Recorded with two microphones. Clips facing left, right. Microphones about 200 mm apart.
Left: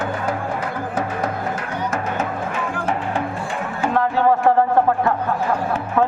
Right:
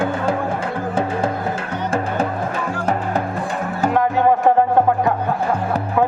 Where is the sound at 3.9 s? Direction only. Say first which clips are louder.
Right 1 dB; 15° right (ahead or behind).